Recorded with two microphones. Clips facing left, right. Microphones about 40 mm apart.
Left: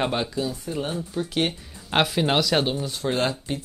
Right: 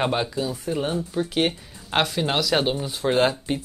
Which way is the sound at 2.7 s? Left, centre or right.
Centre.